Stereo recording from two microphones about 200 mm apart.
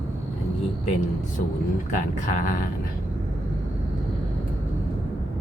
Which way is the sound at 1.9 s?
40° left (ahead or behind).